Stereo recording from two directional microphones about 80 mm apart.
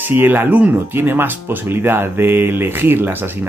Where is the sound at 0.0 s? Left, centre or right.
Right.